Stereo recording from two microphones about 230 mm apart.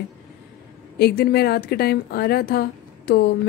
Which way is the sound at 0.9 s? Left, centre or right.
Left.